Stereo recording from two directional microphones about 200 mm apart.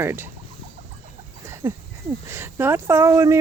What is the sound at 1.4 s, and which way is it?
Speech, 15° right (ahead or behind).